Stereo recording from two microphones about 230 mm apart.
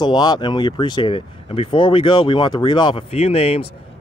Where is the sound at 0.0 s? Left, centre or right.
Centre.